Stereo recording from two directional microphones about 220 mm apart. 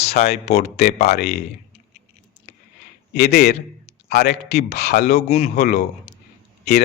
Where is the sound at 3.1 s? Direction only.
50° left (ahead or behind).